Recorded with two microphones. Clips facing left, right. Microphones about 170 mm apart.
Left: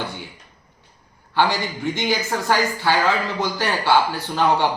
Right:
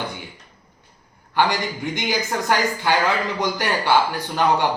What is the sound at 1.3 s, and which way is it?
A man's voice, 15° right (ahead or behind).